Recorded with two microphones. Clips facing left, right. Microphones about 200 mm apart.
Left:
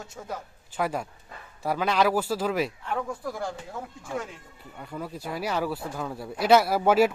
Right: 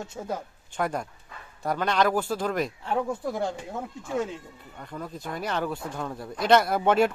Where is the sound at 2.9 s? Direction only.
25° right (ahead or behind).